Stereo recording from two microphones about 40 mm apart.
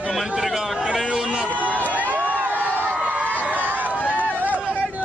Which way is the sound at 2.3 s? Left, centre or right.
Right.